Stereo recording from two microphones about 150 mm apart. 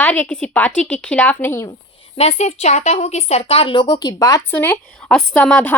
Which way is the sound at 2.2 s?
45° left (ahead or behind).